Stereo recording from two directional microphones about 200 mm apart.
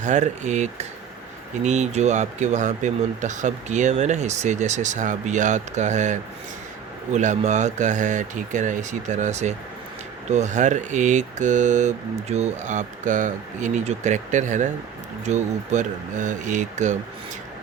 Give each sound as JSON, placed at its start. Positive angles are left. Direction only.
{"t": 0.0, "sound": "speech", "side_deg": -35}